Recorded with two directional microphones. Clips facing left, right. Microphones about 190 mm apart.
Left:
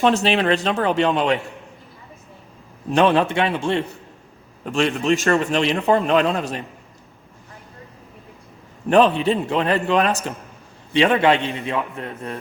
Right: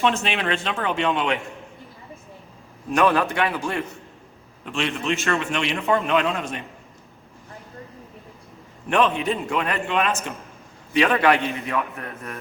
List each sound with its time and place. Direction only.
0.0 s a man's voice: 35° left (ahead or behind)
2.9 s a man's voice: 25° left (ahead or behind)
4.6 s a man's voice: 40° left (ahead or behind)
8.9 s a man's voice: 35° left (ahead or behind)